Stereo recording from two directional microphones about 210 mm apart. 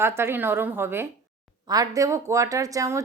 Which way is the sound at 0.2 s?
10° right (ahead or behind).